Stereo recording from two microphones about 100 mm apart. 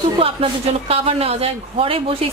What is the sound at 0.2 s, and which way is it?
A woman's voice, 70° right (ahead or behind).